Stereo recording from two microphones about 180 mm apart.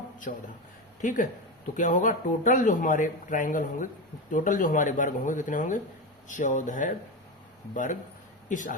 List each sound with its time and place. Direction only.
0.2 s speech: 45° left (ahead or behind)